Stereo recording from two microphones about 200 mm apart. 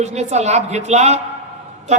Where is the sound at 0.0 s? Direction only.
35° right (ahead or behind).